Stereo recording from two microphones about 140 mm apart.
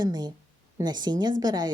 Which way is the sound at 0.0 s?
30° right (ahead or behind).